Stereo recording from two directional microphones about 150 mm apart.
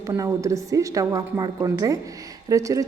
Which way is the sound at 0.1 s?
20° right (ahead or behind).